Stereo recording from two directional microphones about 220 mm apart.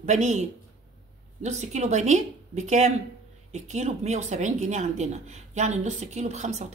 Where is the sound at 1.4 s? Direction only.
30° right (ahead or behind).